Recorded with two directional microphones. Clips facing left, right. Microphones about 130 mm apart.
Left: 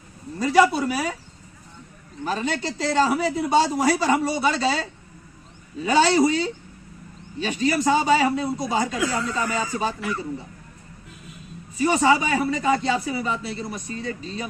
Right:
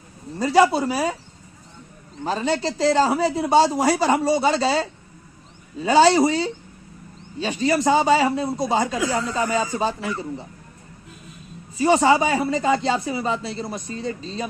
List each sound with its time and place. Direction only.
0.3 s speech: 35° right (ahead or behind)
2.2 s speech: 30° right (ahead or behind)
11.8 s speech: 35° right (ahead or behind)